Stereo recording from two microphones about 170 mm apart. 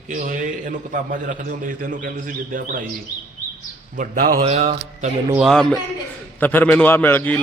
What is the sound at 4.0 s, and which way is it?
Speech, 50° right (ahead or behind).